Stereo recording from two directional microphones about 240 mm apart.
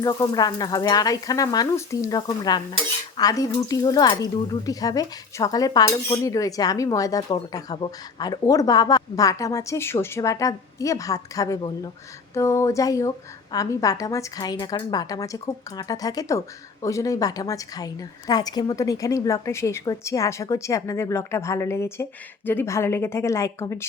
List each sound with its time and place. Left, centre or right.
0.0 s speech: centre